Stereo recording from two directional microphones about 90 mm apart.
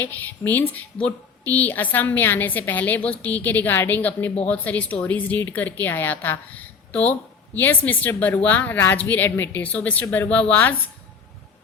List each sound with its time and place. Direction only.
0.0 s a woman's voice: 20° left (ahead or behind)